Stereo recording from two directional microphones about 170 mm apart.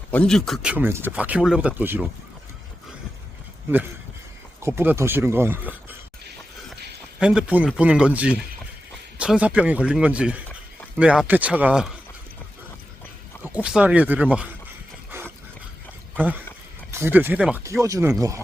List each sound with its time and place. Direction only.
0.1 s a man's voice: 5° left (ahead or behind)
4.6 s a man's voice: 15° right (ahead or behind)
7.2 s a man's voice: 5° right (ahead or behind)
13.4 s a man's voice: 10° right (ahead or behind)
16.1 s a man's voice: 10° right (ahead or behind)